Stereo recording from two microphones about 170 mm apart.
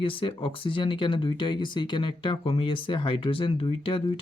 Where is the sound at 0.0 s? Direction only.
30° left (ahead or behind).